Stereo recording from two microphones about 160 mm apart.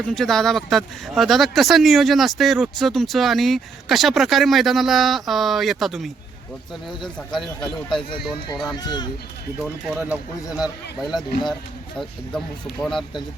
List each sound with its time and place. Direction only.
0.0 s speech: 5° left (ahead or behind)
7.3 s speech: centre (ahead or behind)
8.7 s speech: 25° left (ahead or behind)
9.6 s speech: 5° right (ahead or behind)